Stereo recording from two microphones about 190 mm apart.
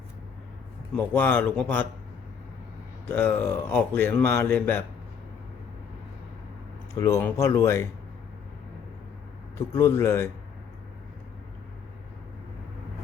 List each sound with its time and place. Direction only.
0.9 s speech: 10° left (ahead or behind)
3.1 s speech: 10° left (ahead or behind)
7.0 s speech: 15° left (ahead or behind)
9.6 s speech: 15° left (ahead or behind)